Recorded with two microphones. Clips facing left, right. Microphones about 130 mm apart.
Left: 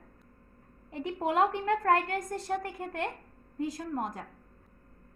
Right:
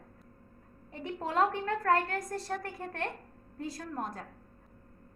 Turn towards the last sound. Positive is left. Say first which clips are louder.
# left 3 dB
turn(degrees=15)  # may be behind; listen again after turning